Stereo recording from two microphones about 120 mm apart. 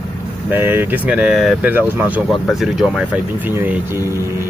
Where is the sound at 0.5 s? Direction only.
15° right (ahead or behind).